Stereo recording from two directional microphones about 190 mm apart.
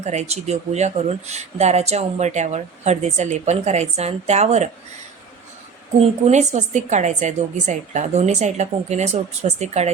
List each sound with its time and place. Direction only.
0.0 s speech: 35° right (ahead or behind)
6.0 s speech: 35° right (ahead or behind)